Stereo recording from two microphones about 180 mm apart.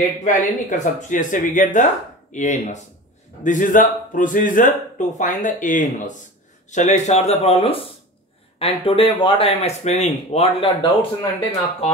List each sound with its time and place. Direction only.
0.2 s speech: 40° left (ahead or behind)